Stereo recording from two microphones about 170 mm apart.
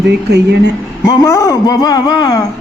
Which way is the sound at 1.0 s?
20° left (ahead or behind).